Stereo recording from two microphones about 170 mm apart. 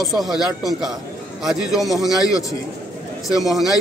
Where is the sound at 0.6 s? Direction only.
20° left (ahead or behind).